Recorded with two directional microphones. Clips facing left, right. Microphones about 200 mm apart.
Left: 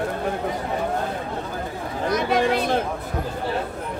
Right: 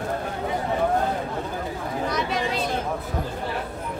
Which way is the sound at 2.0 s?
55° left (ahead or behind).